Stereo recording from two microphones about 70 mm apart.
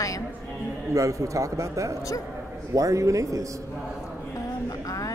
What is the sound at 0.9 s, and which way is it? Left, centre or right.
Speech, right.